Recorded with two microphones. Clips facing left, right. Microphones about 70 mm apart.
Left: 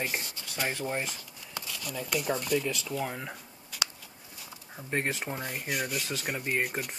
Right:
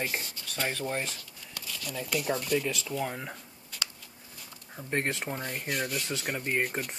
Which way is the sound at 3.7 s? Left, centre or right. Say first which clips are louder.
Left 4 dB; centre.